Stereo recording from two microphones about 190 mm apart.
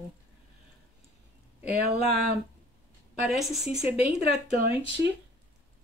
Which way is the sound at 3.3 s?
Centre (ahead or behind).